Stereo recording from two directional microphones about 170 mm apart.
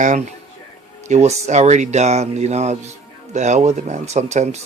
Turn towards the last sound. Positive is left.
turn(degrees=-40)  # may be behind; listen again after turning